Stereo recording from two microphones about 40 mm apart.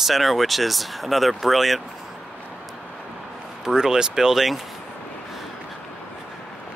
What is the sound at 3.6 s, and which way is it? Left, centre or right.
Speech, centre.